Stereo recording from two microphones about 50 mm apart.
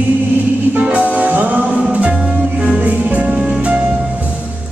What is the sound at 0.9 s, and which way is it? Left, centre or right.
Music, right.